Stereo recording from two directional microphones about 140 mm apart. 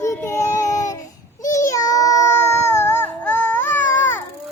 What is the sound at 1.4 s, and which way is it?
Baby cry, 25° left (ahead or behind).